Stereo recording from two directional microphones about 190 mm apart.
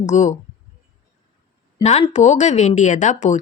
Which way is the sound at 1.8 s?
35° left (ahead or behind).